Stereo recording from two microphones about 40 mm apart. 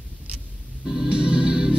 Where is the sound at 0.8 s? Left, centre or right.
Centre.